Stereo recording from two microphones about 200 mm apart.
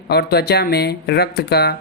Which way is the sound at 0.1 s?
55° left (ahead or behind).